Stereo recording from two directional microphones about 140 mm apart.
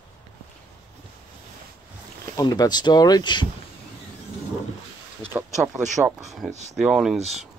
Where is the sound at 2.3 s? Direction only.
30° left (ahead or behind).